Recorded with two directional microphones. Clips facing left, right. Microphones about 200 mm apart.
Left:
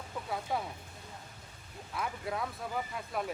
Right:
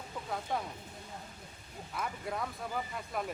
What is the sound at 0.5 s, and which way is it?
Speech, 5° left (ahead or behind).